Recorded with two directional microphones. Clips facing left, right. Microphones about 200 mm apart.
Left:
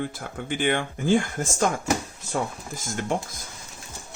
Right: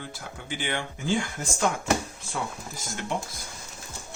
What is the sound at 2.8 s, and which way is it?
Speech, 45° left (ahead or behind).